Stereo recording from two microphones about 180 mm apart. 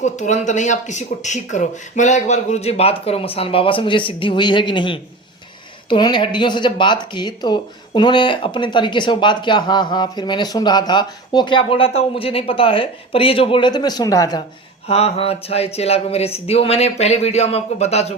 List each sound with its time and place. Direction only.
0.0 s speech: 40° left (ahead or behind); by 14.4 s 20° left (ahead or behind)
14.8 s speech: 35° left (ahead or behind)